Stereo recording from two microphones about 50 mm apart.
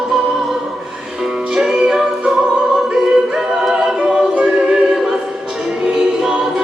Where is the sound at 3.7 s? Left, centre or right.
Centre.